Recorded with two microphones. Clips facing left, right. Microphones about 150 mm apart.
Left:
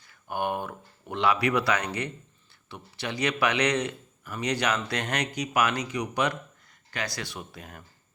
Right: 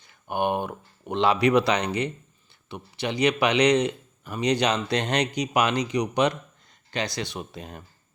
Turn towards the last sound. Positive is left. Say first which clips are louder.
# right 5 dB
turn(degrees=-25)  # may be behind; listen again after turning